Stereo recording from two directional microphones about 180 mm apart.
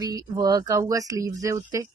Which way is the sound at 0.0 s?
20° right (ahead or behind).